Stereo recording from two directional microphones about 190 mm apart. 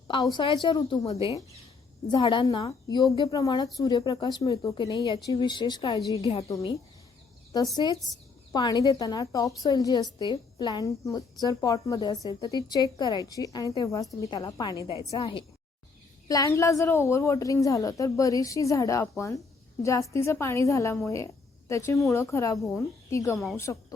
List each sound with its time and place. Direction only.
0.3 s a woman's voice: 25° left (ahead or behind)